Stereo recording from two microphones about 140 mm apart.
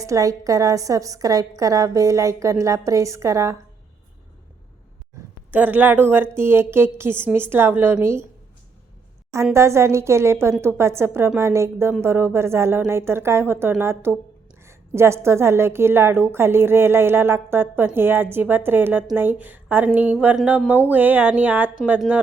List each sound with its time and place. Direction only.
0.0 s a woman's voice: 25° right (ahead or behind)
5.5 s a woman's voice: 10° right (ahead or behind)
9.3 s a woman's voice: 20° right (ahead or behind)